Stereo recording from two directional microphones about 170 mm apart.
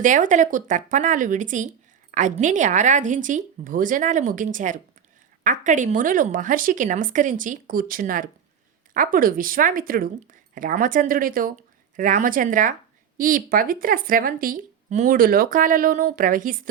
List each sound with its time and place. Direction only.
0.0 s a woman's voice: 50° right (ahead or behind)